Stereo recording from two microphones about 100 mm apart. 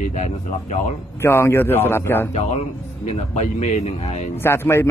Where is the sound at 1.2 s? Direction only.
25° left (ahead or behind).